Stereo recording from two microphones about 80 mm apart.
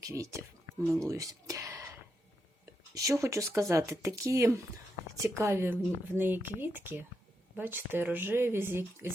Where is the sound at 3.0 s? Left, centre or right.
Right.